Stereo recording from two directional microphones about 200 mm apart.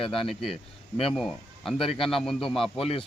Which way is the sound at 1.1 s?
Centre (ahead or behind).